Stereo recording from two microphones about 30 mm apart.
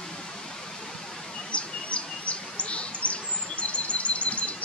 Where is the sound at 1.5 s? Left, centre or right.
Left.